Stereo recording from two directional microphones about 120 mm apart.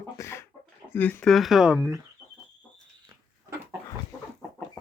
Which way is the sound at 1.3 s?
Centre (ahead or behind).